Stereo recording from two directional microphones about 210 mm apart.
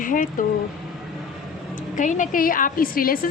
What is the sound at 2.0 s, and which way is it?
A woman's voice, 35° left (ahead or behind).